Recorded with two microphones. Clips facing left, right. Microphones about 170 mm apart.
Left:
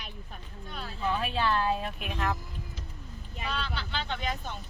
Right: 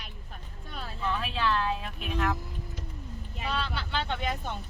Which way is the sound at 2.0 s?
Centre (ahead or behind).